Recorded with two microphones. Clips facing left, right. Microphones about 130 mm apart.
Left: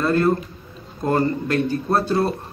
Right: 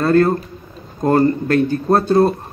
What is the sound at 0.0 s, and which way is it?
A man's voice, 40° right (ahead or behind).